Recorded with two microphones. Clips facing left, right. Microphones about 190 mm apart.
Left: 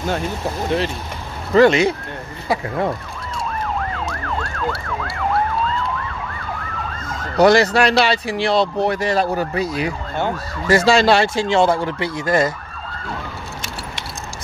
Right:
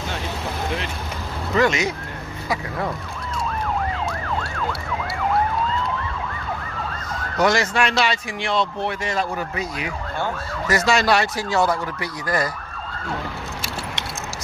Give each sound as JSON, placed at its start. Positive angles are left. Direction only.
{"t": 1.5, "sound": "speech", "side_deg": 35}
{"t": 7.3, "sound": "speech", "side_deg": 35}